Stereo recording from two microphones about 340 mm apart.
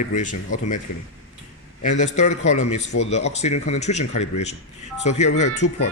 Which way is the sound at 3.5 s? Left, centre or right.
Centre.